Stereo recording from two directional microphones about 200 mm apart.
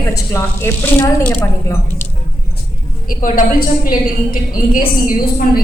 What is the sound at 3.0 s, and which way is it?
Speech, 45° left (ahead or behind).